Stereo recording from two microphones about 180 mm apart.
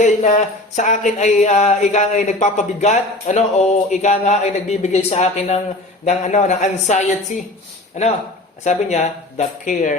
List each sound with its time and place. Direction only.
0.0 s speech: 40° left (ahead or behind)